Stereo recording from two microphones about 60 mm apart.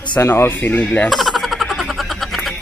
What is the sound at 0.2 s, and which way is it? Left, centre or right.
Speech, left.